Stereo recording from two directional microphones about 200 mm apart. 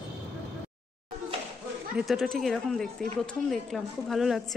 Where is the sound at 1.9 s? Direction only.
Centre (ahead or behind).